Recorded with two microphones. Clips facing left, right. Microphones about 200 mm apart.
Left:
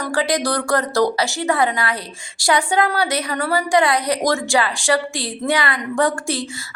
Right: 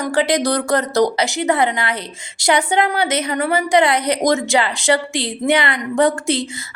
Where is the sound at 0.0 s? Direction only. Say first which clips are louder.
Right 3 dB; 25° right (ahead or behind).